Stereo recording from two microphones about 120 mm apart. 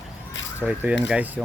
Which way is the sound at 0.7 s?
10° right (ahead or behind).